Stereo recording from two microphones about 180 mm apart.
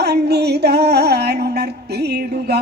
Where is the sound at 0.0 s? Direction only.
65° right (ahead or behind).